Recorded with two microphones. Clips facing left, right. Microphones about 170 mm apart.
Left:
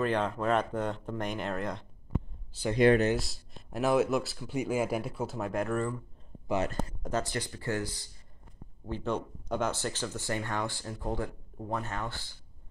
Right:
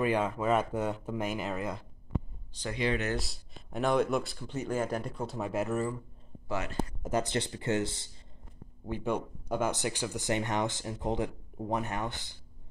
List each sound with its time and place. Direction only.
0.0 s speech: 10° right (ahead or behind)
7.0 s speech: 10° right (ahead or behind)
7.2 s speech: 25° right (ahead or behind)
8.8 s speech: 10° right (ahead or behind)